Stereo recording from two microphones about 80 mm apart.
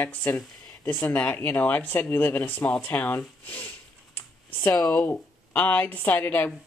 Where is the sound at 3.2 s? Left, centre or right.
Left.